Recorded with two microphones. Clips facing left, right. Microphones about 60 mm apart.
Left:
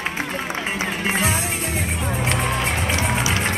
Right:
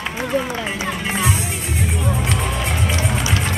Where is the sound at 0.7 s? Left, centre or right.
Left.